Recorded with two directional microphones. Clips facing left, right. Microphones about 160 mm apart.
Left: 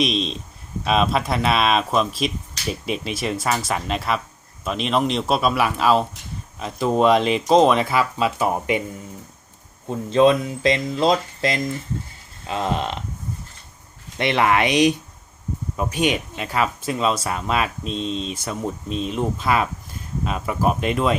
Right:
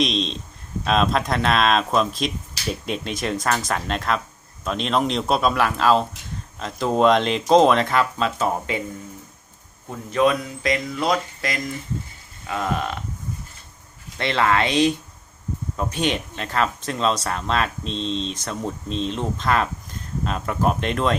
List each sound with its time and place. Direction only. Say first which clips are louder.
0.0 s speech: left 1 dB; 5° left (ahead or behind)
9.9 s speech: left 4 dB; 25° left (ahead or behind)
14.2 s speech: left 2 dB; 15° left (ahead or behind)